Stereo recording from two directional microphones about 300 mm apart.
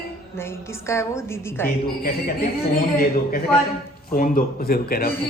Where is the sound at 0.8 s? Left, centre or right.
Centre.